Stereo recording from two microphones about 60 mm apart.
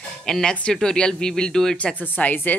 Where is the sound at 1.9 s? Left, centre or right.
Left.